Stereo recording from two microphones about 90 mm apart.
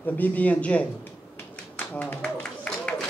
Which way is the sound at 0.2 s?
15° left (ahead or behind).